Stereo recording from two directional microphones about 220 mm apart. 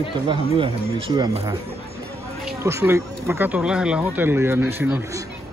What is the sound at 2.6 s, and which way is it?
Speech, 10° right (ahead or behind).